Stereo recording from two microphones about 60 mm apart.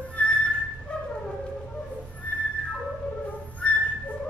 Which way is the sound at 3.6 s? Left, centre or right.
Left.